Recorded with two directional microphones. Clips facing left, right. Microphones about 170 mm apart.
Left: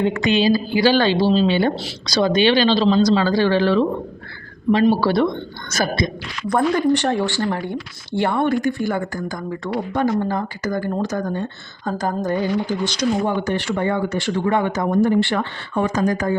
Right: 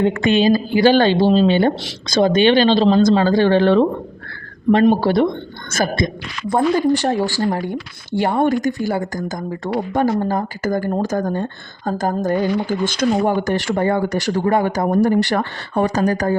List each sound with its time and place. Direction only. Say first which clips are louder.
0.1 s speech: right 2 dB; 50° right (ahead or behind)
4.9 s speech: right 2 dB; 45° right (ahead or behind)
6.5 s speech: right 2 dB; 25° right (ahead or behind)
7.0 s speech: right 2 dB; 40° right (ahead or behind)